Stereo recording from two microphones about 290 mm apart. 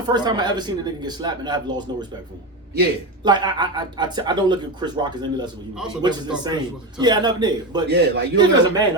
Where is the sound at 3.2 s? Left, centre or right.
Centre.